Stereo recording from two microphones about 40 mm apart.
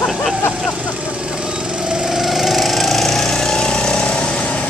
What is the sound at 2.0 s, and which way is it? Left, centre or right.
Lawn mower, centre.